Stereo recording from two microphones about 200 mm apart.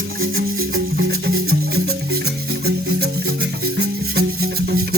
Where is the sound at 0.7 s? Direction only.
60° right (ahead or behind).